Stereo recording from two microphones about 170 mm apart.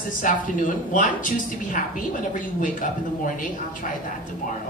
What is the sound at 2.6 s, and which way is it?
Speech, 50° left (ahead or behind).